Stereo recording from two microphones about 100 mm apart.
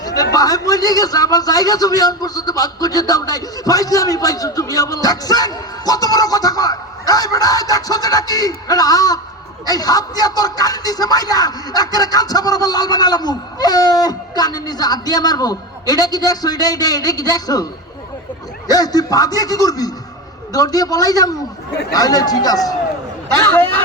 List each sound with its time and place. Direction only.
0.0 s a man's voice: 40° left (ahead or behind)
18.7 s a man's voice: 40° left (ahead or behind)